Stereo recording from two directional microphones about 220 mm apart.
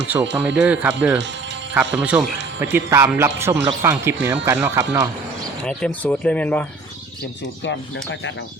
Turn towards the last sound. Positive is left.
turn(degrees=5)  # may be behind; listen again after turning